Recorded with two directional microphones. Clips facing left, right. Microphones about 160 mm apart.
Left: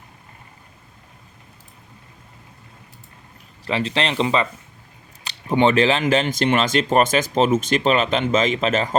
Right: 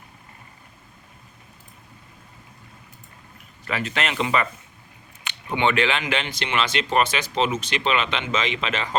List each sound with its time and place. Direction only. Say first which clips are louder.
3.7 s speech: left 4 dB; 30° left (ahead or behind)